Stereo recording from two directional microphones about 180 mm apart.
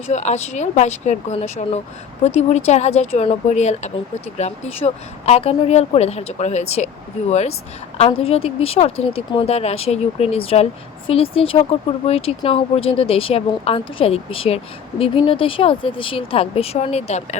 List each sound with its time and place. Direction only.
0.1 s speech: 40° left (ahead or behind)